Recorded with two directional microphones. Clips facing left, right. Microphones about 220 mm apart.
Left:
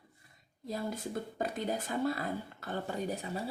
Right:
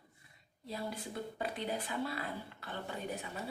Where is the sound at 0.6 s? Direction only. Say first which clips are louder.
Left 4 dB; 45° left (ahead or behind).